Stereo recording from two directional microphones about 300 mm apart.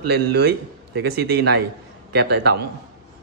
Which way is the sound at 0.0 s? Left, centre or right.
Right.